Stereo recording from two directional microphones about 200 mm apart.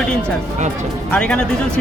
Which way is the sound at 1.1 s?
5° left (ahead or behind).